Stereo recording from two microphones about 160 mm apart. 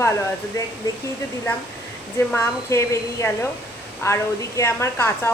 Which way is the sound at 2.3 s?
15° left (ahead or behind).